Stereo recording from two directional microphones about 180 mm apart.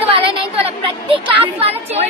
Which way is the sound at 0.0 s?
30° right (ahead or behind).